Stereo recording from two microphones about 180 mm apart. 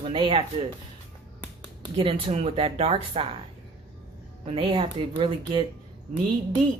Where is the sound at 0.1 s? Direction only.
30° right (ahead or behind).